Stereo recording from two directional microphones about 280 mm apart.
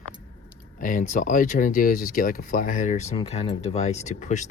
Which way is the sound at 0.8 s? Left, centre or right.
Left.